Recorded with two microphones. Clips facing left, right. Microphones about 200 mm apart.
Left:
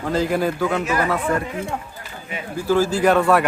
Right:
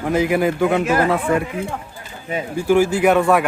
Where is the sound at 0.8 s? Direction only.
50° right (ahead or behind).